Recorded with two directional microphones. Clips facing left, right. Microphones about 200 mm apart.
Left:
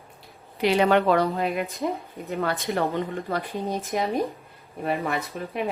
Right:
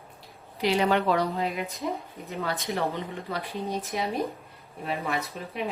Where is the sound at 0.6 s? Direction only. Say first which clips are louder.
Left 4 dB; 60° left (ahead or behind).